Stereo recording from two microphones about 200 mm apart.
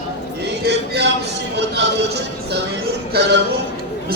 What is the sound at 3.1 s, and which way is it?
Speech, 55° right (ahead or behind).